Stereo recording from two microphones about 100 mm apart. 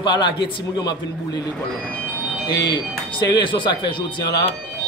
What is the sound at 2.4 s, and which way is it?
Speech, 40° left (ahead or behind).